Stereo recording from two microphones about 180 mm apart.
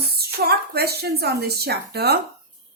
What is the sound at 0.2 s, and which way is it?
Speech, 60° right (ahead or behind).